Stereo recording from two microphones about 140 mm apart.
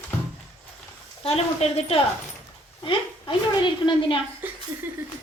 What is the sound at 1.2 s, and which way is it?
A woman's voice, 45° left (ahead or behind).